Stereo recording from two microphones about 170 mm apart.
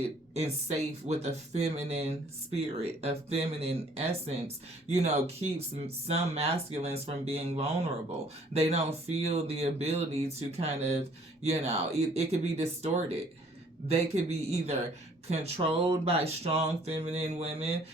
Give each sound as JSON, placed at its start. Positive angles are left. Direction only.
{"t": 0.3, "sound": "speech", "side_deg": -40}